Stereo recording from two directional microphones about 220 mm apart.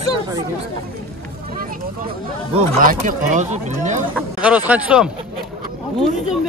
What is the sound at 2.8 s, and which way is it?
Speech, 40° right (ahead or behind).